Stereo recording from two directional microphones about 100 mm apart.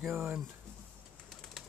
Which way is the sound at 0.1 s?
15° right (ahead or behind).